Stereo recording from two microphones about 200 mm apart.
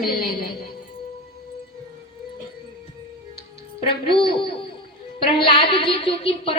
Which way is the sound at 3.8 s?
25° left (ahead or behind).